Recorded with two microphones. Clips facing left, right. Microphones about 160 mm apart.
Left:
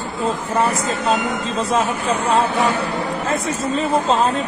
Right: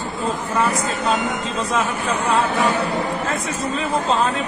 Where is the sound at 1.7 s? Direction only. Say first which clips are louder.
Left 3 dB; 35° left (ahead or behind).